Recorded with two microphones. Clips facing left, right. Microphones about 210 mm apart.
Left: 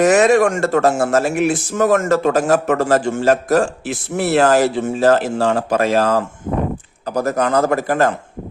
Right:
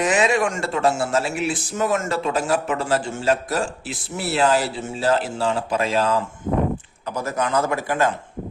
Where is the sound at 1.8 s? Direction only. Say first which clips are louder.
Left 8 dB; 50° left (ahead or behind).